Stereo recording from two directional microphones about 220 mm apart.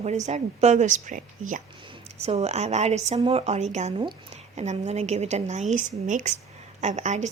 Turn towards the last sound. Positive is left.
turn(degrees=-30)  # may be behind; listen again after turning